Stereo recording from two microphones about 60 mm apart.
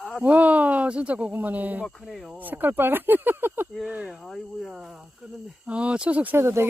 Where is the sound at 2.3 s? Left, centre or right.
Right.